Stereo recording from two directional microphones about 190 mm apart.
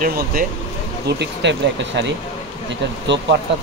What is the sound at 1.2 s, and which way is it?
Speech, 65° right (ahead or behind).